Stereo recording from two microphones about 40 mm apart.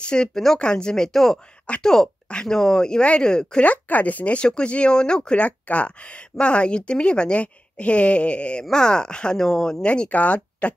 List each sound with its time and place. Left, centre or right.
0.0 s speech: left
3.6 s speech: left
4.4 s speech: left
5.4 s speech: left; by 9.8 s centre
10.0 s speech: left